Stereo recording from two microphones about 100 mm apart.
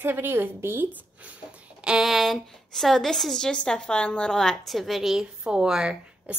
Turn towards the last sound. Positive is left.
turn(degrees=-10)  # may be behind; listen again after turning